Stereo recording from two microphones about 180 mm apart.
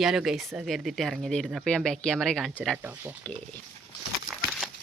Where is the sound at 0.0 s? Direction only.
Centre (ahead or behind).